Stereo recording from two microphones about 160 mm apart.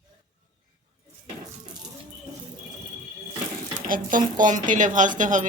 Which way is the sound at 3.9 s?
55° right (ahead or behind).